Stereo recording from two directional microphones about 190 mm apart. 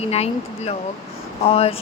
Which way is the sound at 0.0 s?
35° left (ahead or behind).